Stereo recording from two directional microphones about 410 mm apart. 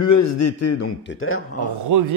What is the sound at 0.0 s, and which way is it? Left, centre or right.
A man's voice, left.